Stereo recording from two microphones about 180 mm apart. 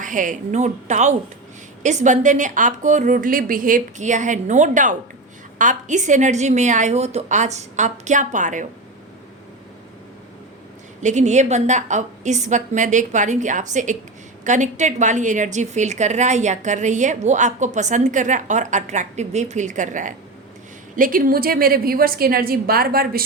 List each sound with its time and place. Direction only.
0.0 s a woman's voice: 45° right (ahead or behind)
11.0 s a woman's voice: 40° right (ahead or behind)